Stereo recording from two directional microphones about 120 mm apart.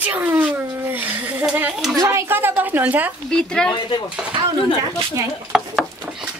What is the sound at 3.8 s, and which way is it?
Speech, 45° left (ahead or behind).